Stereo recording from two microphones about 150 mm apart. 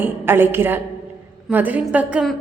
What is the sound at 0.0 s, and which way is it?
A woman's voice, 15° right (ahead or behind).